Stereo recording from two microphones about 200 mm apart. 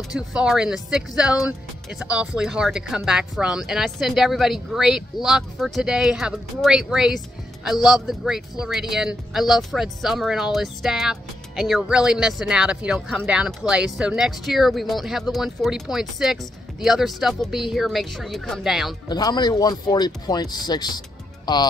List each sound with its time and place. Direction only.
0.1 s speech: 5° right (ahead or behind)
19.0 s speech: 20° left (ahead or behind)